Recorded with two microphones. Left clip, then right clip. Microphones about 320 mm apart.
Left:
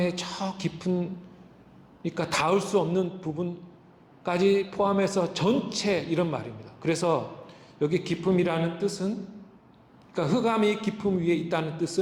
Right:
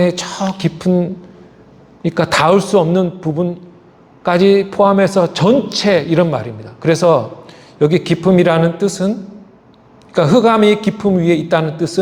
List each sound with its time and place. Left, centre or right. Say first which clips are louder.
0.0 s a man's voice: right 13 dB; right
2.1 s a man's voice: right 13 dB; right
10.2 s a man's voice: right 15 dB; right